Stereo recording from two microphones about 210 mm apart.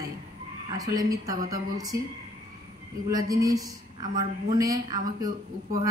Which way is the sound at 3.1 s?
15° right (ahead or behind).